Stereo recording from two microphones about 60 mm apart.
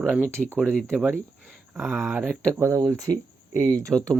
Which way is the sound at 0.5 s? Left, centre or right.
Centre.